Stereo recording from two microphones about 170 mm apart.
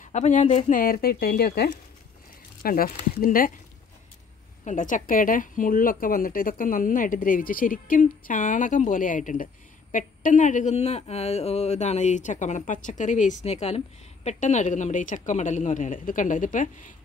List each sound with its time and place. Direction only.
0.0 s speech: 45° left (ahead or behind)
4.6 s a woman's voice: 50° left (ahead or behind)